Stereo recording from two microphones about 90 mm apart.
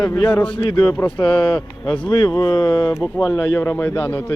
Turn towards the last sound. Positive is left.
turn(degrees=30)  # may be behind; listen again after turning